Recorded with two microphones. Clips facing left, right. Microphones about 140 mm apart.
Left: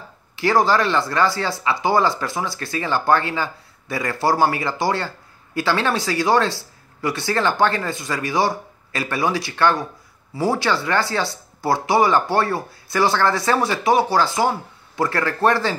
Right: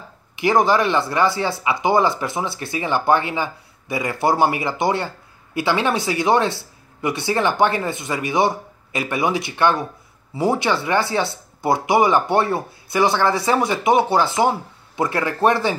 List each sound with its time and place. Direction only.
0.4 s speech: 20° right (ahead or behind)